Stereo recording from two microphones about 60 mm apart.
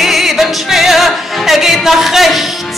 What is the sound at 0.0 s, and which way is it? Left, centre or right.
Music, centre.